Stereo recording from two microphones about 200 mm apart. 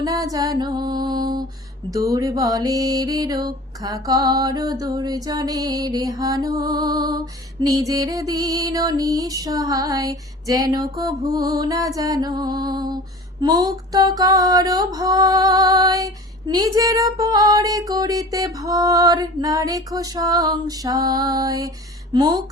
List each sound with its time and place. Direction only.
0.0 s music: 15° right (ahead or behind)
1.9 s mantra: 15° right (ahead or behind)
11.9 s music: 20° right (ahead or behind)
13.4 s mantra: 20° right (ahead or behind)
22.1 s music: 20° right (ahead or behind)